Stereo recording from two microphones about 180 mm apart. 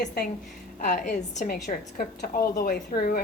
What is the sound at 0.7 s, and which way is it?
A woman's voice, 45° left (ahead or behind).